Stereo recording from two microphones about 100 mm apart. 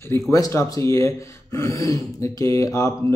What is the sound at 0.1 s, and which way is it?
A man's voice, 30° left (ahead or behind).